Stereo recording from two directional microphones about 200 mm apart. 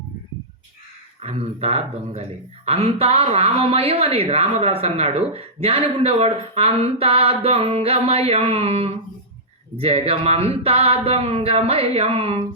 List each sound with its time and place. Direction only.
1.2 s a woman's voice: 30° right (ahead or behind)